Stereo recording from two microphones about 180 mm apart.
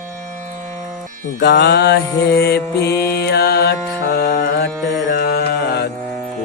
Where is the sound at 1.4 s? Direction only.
70° left (ahead or behind).